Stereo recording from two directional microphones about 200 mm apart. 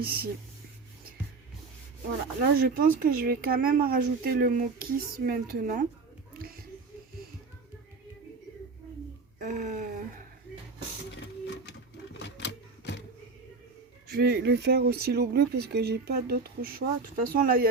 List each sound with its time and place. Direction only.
0.0 s speech: 50° right (ahead or behind)
2.4 s speech: 45° right (ahead or behind)
9.4 s a sound: 40° right (ahead or behind)
12.2 s typewriter: 60° left (ahead or behind)
14.1 s speech: 50° right (ahead or behind)